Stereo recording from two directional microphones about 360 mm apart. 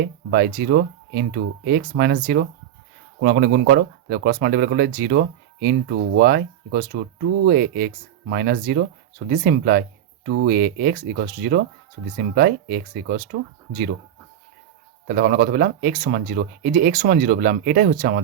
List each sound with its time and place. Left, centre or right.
0.0 s speech: right
15.0 s speech: right